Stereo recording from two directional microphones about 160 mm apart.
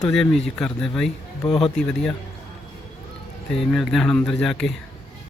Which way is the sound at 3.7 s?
5° left (ahead or behind).